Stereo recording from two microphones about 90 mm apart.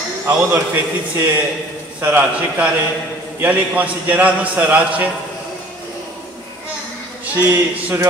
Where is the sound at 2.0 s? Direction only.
20° right (ahead or behind).